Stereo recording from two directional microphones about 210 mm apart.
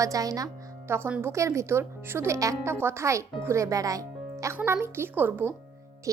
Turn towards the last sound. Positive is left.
turn(degrees=-15)  # may be behind; listen again after turning